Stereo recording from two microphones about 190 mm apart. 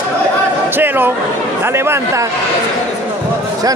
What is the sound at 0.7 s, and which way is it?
A man's voice, 10° right (ahead or behind).